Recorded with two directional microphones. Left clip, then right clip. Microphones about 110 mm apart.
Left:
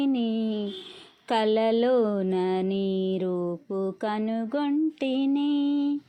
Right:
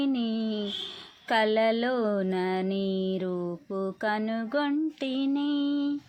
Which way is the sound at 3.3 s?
35° left (ahead or behind).